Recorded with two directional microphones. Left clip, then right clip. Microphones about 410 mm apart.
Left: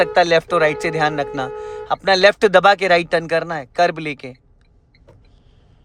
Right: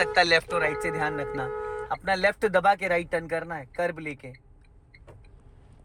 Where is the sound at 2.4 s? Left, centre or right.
Left.